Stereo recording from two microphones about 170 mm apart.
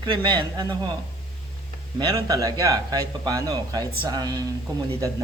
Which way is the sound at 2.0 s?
20° right (ahead or behind).